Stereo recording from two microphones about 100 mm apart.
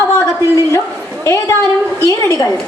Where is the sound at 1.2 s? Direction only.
30° left (ahead or behind).